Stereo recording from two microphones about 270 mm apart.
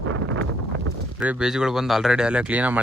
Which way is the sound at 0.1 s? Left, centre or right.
Right.